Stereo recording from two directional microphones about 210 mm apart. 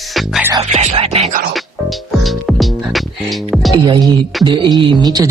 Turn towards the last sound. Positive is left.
turn(degrees=-20)  # may be behind; listen again after turning